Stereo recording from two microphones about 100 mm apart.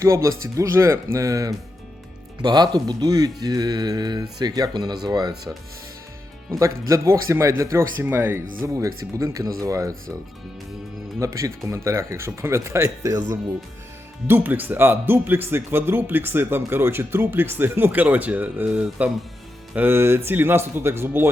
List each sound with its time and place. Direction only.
0.0 s speech: 30° right (ahead or behind)
2.4 s speech: 45° right (ahead or behind)
6.6 s speech: 30° right (ahead or behind)
11.2 s speech: 30° right (ahead or behind)
14.3 s speech: 20° right (ahead or behind)